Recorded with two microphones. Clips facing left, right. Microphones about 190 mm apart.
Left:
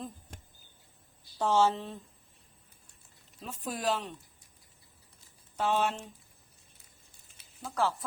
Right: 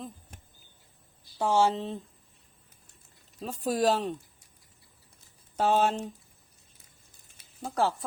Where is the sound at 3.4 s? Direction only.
40° right (ahead or behind).